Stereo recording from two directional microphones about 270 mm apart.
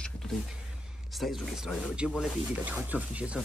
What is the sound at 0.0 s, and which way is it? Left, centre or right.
Music, centre.